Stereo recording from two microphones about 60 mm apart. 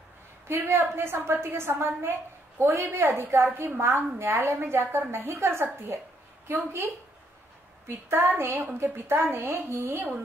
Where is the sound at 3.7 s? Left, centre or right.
Right.